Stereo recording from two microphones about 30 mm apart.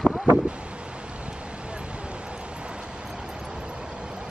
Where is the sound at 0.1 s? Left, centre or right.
Centre.